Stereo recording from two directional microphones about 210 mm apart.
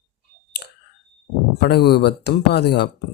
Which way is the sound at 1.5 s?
50° left (ahead or behind).